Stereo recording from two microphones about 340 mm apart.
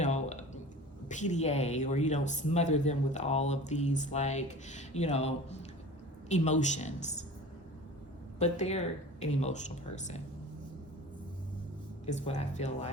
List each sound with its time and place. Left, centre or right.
0.0 s a sound: left
1.0 s speech: left
8.4 s speech: centre
12.0 s speech: centre